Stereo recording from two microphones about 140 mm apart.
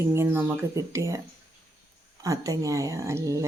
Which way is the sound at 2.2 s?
25° right (ahead or behind).